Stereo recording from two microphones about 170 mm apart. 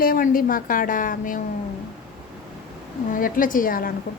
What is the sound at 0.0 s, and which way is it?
A woman's voice, 55° left (ahead or behind).